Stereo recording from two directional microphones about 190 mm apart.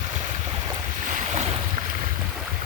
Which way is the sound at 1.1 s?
40° right (ahead or behind).